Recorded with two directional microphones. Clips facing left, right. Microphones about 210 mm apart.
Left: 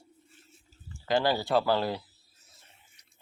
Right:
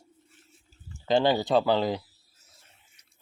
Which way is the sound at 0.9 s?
25° right (ahead or behind).